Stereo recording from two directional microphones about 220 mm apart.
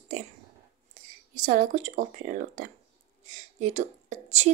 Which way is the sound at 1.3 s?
35° right (ahead or behind).